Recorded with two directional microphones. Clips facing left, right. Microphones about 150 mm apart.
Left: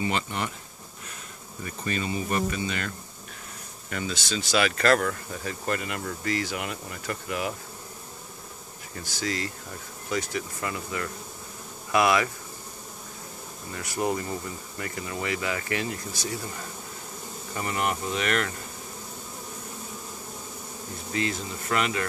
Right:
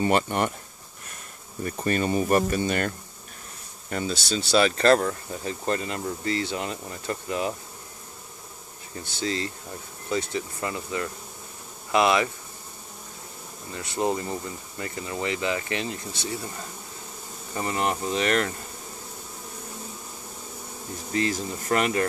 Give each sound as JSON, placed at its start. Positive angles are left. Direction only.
{"t": 0.0, "sound": "speech", "side_deg": -50}
{"t": 1.6, "sound": "speech", "side_deg": -45}
{"t": 3.9, "sound": "speech", "side_deg": -35}
{"t": 9.2, "sound": "speech", "side_deg": -25}
{"t": 13.7, "sound": "speech", "side_deg": -25}
{"t": 17.6, "sound": "speech", "side_deg": -30}
{"t": 21.1, "sound": "speech", "side_deg": -40}